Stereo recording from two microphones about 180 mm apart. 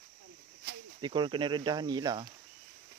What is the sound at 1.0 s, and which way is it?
Speech, 25° right (ahead or behind).